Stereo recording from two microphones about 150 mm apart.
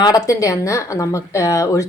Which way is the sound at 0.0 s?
25° left (ahead or behind).